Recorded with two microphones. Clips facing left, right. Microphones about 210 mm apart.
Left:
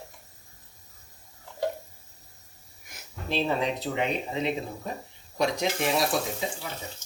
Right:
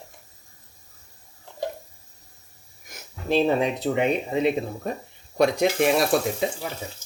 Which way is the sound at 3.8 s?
50° right (ahead or behind).